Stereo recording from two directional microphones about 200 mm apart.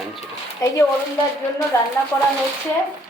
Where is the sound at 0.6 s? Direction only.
15° left (ahead or behind).